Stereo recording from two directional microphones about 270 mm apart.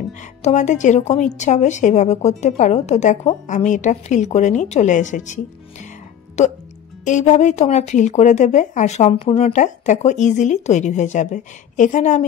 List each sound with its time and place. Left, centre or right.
0.4 s speech: left